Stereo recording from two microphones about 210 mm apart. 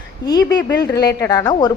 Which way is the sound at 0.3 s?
20° left (ahead or behind).